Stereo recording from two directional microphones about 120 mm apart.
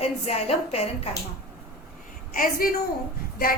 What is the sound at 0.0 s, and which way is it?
Speech, 60° left (ahead or behind).